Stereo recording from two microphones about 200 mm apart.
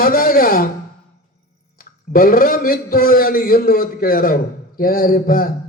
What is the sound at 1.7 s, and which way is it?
A man's voice, 45° left (ahead or behind).